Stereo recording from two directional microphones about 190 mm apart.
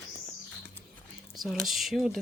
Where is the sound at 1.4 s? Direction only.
Centre (ahead or behind).